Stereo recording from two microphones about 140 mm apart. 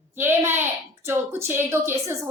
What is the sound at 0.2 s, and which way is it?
Speech, 15° right (ahead or behind).